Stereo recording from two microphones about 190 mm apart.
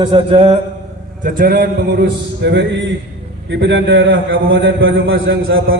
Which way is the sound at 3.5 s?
70° right (ahead or behind).